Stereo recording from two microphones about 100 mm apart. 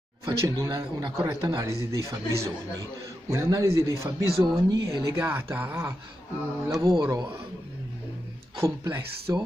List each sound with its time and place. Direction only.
0.2 s speech: 35° right (ahead or behind)
1.6 s speech: 30° right (ahead or behind)
6.8 s speech: 40° right (ahead or behind)
8.5 s speech: 30° right (ahead or behind)